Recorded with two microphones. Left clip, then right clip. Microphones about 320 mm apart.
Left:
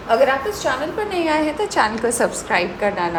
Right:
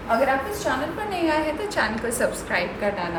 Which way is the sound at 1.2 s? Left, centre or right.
Centre.